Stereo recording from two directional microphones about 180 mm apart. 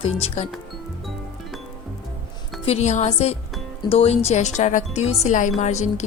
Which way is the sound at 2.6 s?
40° left (ahead or behind).